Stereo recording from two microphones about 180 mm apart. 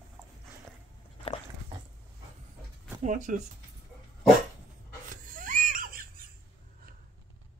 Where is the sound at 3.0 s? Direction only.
45° right (ahead or behind).